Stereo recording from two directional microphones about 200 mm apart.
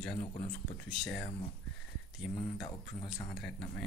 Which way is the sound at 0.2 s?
35° left (ahead or behind).